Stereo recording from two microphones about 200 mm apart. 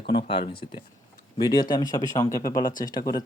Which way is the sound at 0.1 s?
25° left (ahead or behind).